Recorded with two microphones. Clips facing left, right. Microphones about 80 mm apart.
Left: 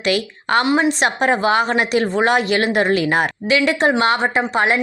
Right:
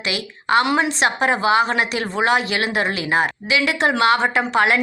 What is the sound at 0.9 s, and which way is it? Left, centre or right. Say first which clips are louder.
A woman's voice: left 2 dB; left.